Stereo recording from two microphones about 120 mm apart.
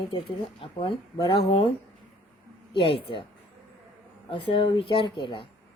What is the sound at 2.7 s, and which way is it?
Speech, 45° left (ahead or behind).